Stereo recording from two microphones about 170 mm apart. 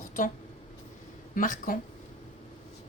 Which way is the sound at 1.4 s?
55° left (ahead or behind).